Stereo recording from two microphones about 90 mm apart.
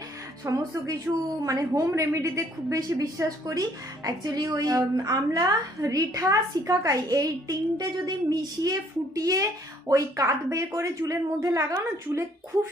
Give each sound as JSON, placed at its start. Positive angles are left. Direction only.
{"t": 0.6, "sound": "a woman's voice", "side_deg": -45}